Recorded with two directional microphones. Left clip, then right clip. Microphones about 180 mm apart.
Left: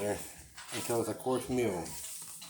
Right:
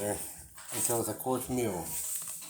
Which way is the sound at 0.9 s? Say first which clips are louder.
Even; 15° right (ahead or behind).